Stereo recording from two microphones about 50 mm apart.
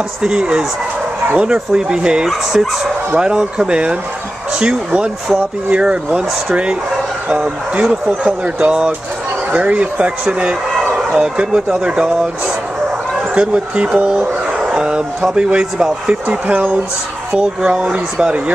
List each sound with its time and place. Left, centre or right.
0.2 s speech: centre
11.0 s chicken: centre
11.3 s speech: centre
13.3 s speech: right